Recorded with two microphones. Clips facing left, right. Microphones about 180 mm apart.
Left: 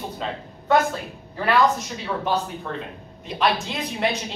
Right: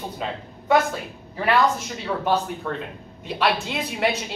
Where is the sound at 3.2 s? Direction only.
5° right (ahead or behind).